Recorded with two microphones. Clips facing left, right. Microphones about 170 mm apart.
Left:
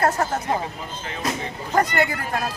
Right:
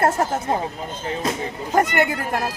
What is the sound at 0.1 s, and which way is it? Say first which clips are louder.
Speech: right 2 dB; 25° right (ahead or behind).